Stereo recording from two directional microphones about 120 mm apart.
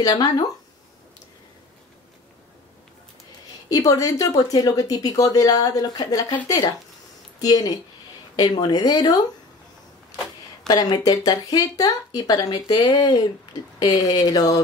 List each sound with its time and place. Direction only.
0.0 s speech: 35° left (ahead or behind)
3.6 s a woman's voice: 30° left (ahead or behind)
10.7 s speech: 35° left (ahead or behind)